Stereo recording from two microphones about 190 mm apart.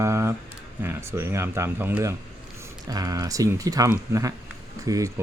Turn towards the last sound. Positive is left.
turn(degrees=-15)  # may be behind; listen again after turning